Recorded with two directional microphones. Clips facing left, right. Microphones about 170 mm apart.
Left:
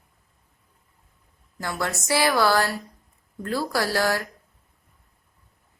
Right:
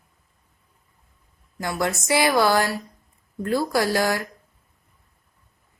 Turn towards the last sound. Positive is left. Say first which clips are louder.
# right 2 dB
turn(degrees=-15)  # may be behind; listen again after turning